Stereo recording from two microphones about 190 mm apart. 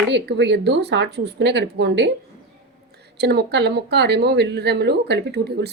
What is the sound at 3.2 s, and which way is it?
Speech, 60° right (ahead or behind).